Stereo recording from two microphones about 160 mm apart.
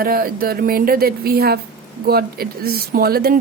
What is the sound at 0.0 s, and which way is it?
Speech, 65° right (ahead or behind).